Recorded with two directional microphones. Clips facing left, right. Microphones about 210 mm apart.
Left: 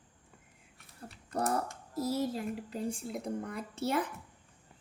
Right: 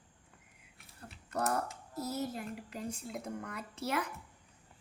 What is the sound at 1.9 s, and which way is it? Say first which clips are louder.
Speech: left 5 dB; 30° left (ahead or behind).